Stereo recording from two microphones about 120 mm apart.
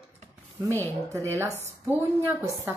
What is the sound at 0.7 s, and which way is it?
A woman's voice, 15° left (ahead or behind).